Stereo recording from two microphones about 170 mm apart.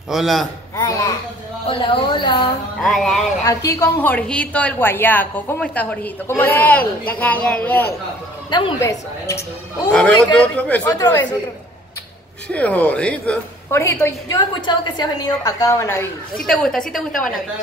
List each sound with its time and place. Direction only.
0.1 s a woman's voice: centre (ahead or behind)
0.7 s a woman's voice: 20° left (ahead or behind)
1.7 s a woman's voice: 30° left (ahead or behind)
2.8 s a woman's voice: centre (ahead or behind)
3.4 s a woman's voice: 20° left (ahead or behind)
8.5 s a woman's voice: 25° left (ahead or behind)
9.8 s a woman's voice: 5° left (ahead or behind)
10.9 s a woman's voice: 20° left (ahead or behind)
12.5 s a woman's voice: 10° left (ahead or behind)
14.7 s a woman's voice: 25° left (ahead or behind)
16.3 s a woman's voice: 5° left (ahead or behind)